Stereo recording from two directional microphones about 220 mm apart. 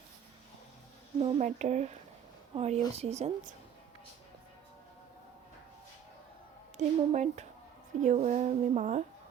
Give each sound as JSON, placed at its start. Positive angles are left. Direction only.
{"t": 1.2, "sound": "a woman's voice", "side_deg": -30}
{"t": 6.7, "sound": "speech", "side_deg": -30}